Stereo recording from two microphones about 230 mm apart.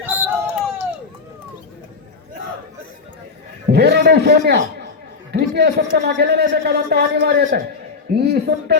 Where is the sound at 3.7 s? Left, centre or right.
Right.